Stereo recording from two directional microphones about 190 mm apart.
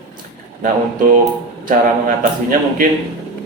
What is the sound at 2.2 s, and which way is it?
Speech, 45° right (ahead or behind).